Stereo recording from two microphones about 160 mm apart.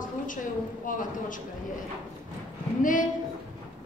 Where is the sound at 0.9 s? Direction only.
55° left (ahead or behind).